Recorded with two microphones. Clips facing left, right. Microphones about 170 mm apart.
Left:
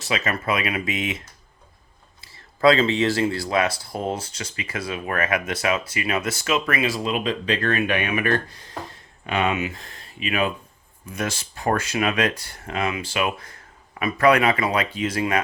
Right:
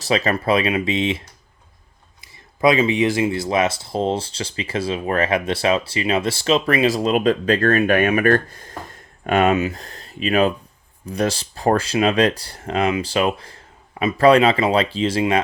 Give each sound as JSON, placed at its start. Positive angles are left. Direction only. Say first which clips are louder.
{"t": 0.0, "sound": "speech", "louder": "right 6 dB", "side_deg": -35}
{"t": 2.2, "sound": "speech", "louder": "even", "side_deg": -15}